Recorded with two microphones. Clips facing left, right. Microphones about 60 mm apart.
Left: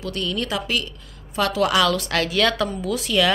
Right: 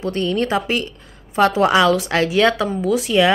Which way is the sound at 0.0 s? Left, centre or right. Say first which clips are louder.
Right 6 dB; right.